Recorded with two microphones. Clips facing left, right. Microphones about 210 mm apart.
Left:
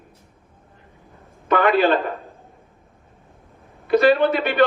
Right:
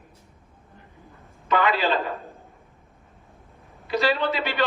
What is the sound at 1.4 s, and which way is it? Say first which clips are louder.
Speech: left 6 dB; 55° left (ahead or behind).